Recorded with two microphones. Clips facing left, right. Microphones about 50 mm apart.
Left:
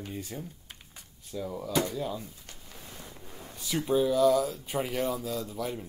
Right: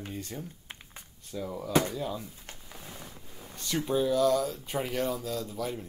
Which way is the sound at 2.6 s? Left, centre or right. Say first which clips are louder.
Right 1 dB; centre.